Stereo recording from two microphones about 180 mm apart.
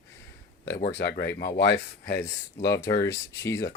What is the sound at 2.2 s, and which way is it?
Speech, 15° left (ahead or behind).